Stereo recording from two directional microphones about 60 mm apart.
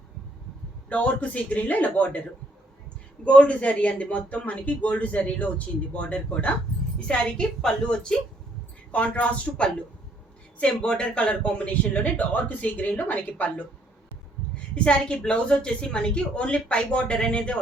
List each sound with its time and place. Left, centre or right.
0.9 s speech: left
3.2 s a woman's voice: left
14.5 s a woman's voice: centre